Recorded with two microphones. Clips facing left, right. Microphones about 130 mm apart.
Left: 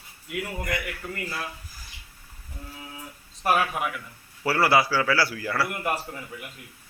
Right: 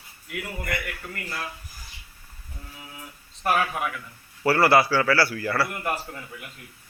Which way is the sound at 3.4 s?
10° left (ahead or behind).